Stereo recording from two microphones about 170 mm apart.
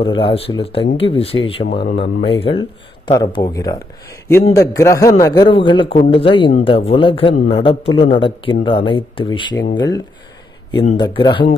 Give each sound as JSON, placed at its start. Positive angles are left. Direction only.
{"t": 0.0, "sound": "a man's voice", "side_deg": 30}
{"t": 1.7, "sound": "speech", "side_deg": 50}
{"t": 2.0, "sound": "a man's voice", "side_deg": 35}